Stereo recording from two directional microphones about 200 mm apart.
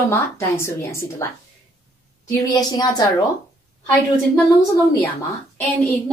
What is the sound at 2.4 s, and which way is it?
Speech, 20° left (ahead or behind).